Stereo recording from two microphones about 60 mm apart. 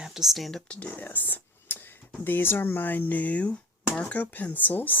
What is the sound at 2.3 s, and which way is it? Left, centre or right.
Speech, left.